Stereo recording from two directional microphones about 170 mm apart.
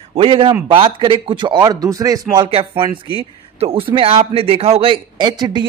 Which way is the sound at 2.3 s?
30° right (ahead or behind).